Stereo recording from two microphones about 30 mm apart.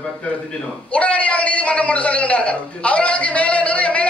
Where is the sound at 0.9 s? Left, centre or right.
Left.